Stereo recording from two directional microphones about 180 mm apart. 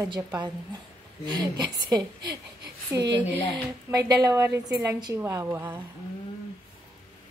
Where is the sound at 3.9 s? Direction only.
20° right (ahead or behind).